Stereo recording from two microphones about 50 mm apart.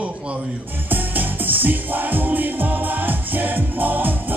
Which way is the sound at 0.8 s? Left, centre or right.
Right.